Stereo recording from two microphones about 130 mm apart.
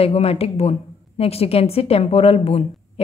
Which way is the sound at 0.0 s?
50° left (ahead or behind).